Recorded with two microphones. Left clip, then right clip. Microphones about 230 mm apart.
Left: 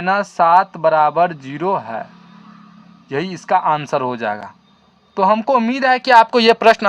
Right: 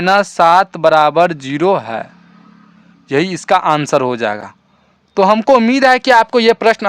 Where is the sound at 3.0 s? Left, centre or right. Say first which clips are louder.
Right 6 dB; right.